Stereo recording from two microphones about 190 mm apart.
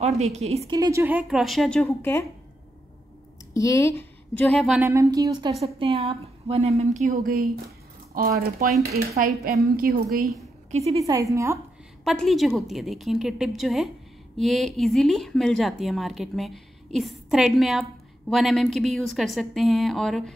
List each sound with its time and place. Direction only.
0.2 s a woman's voice: 35° right (ahead or behind)
0.7 s speech: 15° right (ahead or behind); by 2.2 s 15° left (ahead or behind)
3.5 s speech: 15° left (ahead or behind)
4.4 s speech: centre (ahead or behind)
4.8 s speech: 15° right (ahead or behind)
5.8 s a woman's voice: 30° right (ahead or behind)
8.1 s a woman's voice: 50° right (ahead or behind)
10.0 s speech: centre (ahead or behind)
10.7 s a woman's voice: 35° right (ahead or behind)
11.0 s speech: 15° right (ahead or behind)
12.0 s speech: centre (ahead or behind)